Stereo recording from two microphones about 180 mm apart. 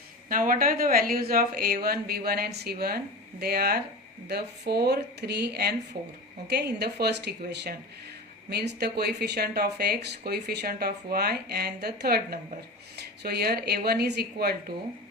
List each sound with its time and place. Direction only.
0.3 s speech: 50° right (ahead or behind)